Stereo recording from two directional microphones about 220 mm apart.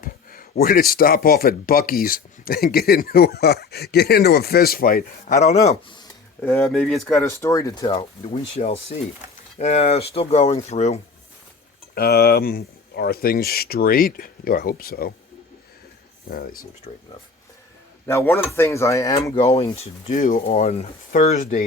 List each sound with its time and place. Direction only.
0.0 s speech: 40° left (ahead or behind); by 7.9 s 15° left (ahead or behind)
7.9 s speech: 25° left (ahead or behind)
11.9 s speech: 45° left (ahead or behind)
16.3 s speech: 40° left (ahead or behind)
18.0 s speech: 10° left (ahead or behind); by 20.4 s 40° left (ahead or behind)
20.5 s speech: 30° left (ahead or behind)